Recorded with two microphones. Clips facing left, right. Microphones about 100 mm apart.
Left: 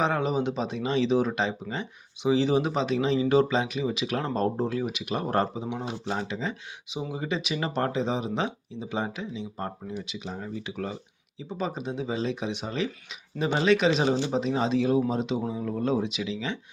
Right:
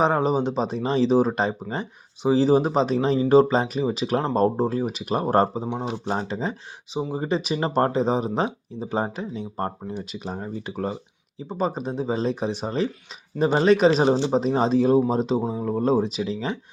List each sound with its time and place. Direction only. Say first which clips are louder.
0.0 s speech: right 5 dB; 35° right (ahead or behind)